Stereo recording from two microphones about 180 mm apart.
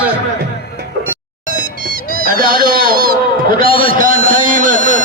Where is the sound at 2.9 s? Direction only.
55° right (ahead or behind).